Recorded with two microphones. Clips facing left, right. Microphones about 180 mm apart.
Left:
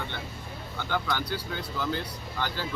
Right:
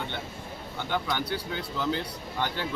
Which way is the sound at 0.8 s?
20° right (ahead or behind).